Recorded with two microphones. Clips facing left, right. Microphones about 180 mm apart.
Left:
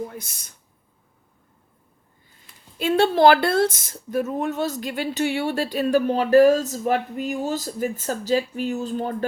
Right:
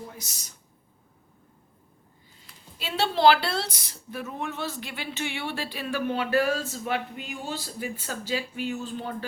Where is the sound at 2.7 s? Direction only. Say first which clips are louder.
Left 9 dB; 50° left (ahead or behind).